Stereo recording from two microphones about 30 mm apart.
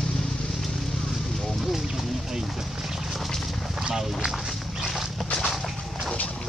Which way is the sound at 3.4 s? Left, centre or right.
Centre.